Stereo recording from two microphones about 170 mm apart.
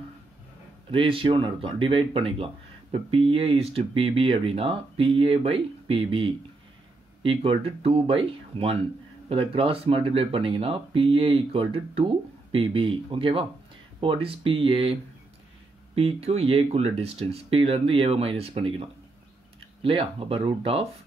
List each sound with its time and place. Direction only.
0.9 s speech: 30° right (ahead or behind)